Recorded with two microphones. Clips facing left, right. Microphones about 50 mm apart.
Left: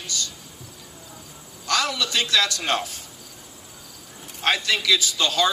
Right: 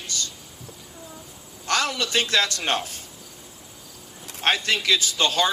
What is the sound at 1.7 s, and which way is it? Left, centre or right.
A man's voice, right.